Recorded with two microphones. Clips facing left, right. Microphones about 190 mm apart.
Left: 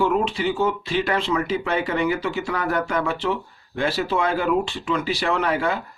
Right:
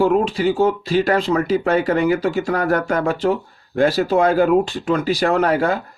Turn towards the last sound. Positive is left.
turn(degrees=-40)  # may be behind; listen again after turning